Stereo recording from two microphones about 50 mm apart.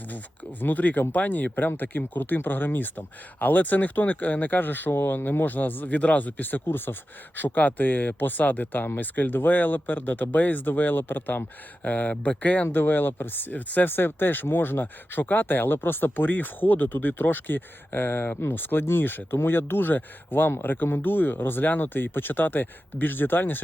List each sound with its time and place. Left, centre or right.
0.6 s speech: left
11.8 s speech: left
12.7 s speech: left